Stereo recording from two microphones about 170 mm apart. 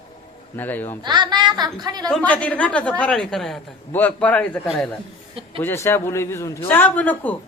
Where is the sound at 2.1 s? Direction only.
5° left (ahead or behind).